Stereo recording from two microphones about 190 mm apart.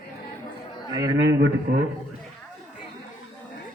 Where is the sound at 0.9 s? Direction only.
20° right (ahead or behind).